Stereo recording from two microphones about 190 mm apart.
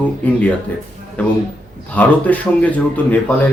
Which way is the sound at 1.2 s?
10° left (ahead or behind).